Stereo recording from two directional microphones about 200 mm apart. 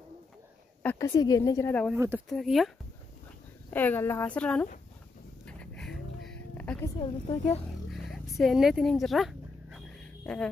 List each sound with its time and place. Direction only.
0.8 s a woman's voice: 15° left (ahead or behind)
2.0 s speech: 10° right (ahead or behind)
2.2 s speech: centre (ahead or behind)
3.7 s a woman's voice: 10° left (ahead or behind)
5.5 s music: 5° left (ahead or behind)
7.0 s a woman's voice: 30° left (ahead or behind)
7.9 s dog: centre (ahead or behind)